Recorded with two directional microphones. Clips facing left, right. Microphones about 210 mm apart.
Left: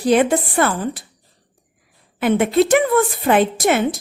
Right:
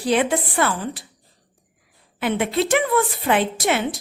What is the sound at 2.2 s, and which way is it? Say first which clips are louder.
A woman's voice: left 6 dB; 45° left (ahead or behind).